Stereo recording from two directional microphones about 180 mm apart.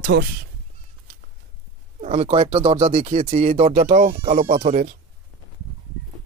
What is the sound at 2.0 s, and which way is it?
Speech, 35° right (ahead or behind).